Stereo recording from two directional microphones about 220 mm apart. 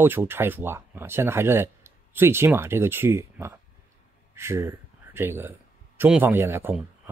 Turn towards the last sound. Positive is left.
turn(degrees=-10)  # may be behind; listen again after turning